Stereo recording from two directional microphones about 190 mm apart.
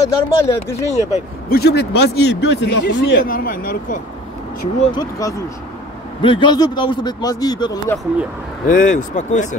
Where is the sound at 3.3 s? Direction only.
45° left (ahead or behind).